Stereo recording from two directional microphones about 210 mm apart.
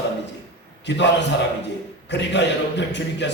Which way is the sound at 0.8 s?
55° left (ahead or behind).